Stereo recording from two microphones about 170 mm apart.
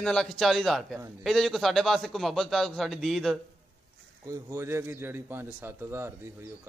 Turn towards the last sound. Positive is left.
turn(degrees=-15)  # may be behind; listen again after turning